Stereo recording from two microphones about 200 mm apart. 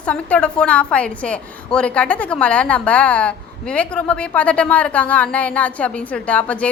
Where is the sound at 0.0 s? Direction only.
5° left (ahead or behind).